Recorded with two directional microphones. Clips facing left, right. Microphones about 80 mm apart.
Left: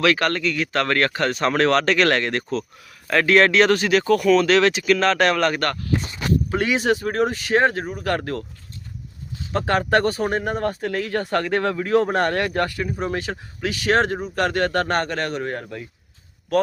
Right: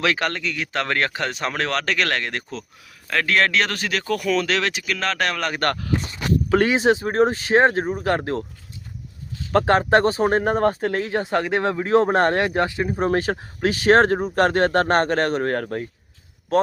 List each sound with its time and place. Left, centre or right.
0.0 s speech: centre
6.7 s speech: right
9.6 s speech: right
11.1 s speech: centre
13.0 s speech: right
16.5 s speech: right